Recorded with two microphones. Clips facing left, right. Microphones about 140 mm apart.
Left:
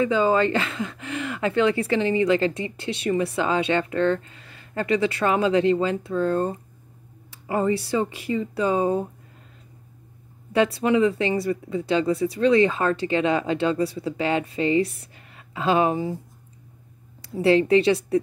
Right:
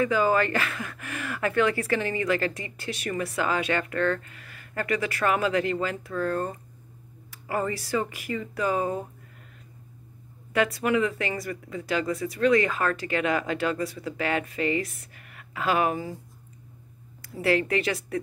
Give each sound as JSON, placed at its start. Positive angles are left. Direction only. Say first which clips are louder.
{"t": 0.0, "sound": "speech", "louder": "left 3 dB", "side_deg": 25}
{"t": 10.5, "sound": "speech", "louder": "left 4 dB", "side_deg": 25}
{"t": 17.2, "sound": "speech", "louder": "left 6 dB", "side_deg": 30}